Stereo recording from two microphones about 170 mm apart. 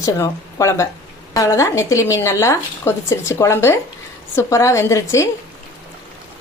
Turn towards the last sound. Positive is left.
turn(degrees=20)  # may be behind; listen again after turning